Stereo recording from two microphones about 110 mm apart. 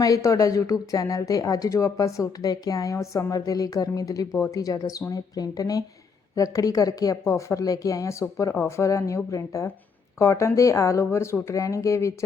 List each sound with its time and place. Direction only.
0.0 s speech: 30° left (ahead or behind)